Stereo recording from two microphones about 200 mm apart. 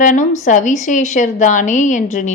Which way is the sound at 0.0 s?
40° left (ahead or behind).